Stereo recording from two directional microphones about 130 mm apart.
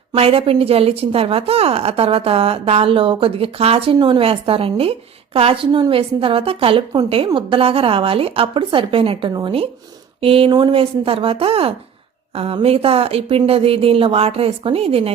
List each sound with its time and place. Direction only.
0.2 s a woman's voice: 45° right (ahead or behind)
3.9 s a woman's voice: 35° right (ahead or behind)